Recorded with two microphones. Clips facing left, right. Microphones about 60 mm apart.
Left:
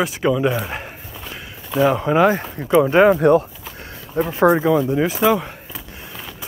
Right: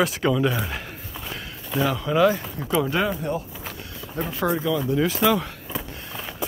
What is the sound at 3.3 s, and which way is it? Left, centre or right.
Speech, left.